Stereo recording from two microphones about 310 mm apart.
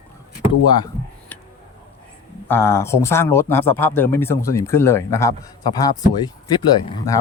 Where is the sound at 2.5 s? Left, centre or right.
Centre.